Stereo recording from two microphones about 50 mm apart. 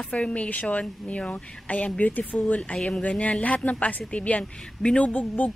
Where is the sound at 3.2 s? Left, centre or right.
Left.